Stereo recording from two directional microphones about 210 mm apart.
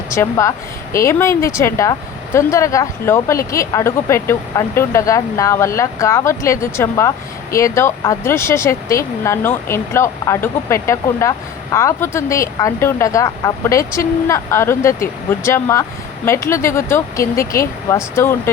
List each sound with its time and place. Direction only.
0.1 s speech: 15° left (ahead or behind)